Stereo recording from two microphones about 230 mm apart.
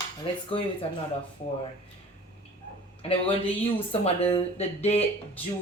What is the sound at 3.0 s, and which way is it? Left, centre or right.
Speech, left.